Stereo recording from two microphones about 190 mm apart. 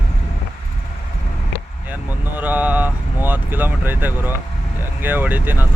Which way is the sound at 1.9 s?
10° right (ahead or behind).